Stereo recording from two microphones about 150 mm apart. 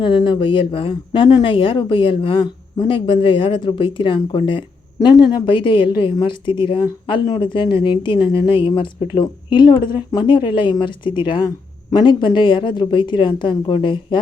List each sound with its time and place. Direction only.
0.0 s speech: 30° left (ahead or behind)